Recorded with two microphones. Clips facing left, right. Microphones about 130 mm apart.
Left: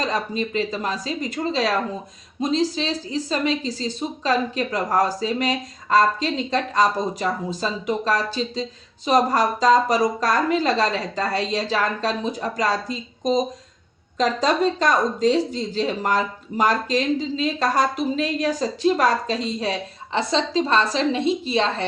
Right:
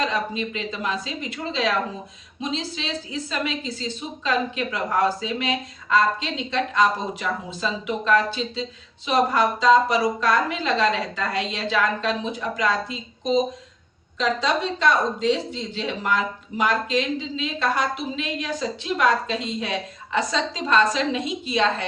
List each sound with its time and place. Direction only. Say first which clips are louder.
0.0 s speech: left 1 dB; 40° left (ahead or behind)